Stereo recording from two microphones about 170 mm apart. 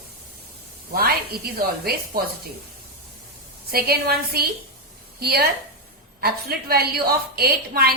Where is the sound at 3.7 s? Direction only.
65° right (ahead or behind).